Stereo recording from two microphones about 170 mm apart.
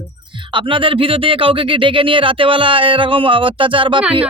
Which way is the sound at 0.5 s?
30° right (ahead or behind).